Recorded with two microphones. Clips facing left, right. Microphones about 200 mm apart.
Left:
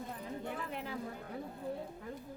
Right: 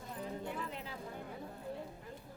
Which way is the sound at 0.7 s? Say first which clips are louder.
Left 4 dB; 55° left (ahead or behind).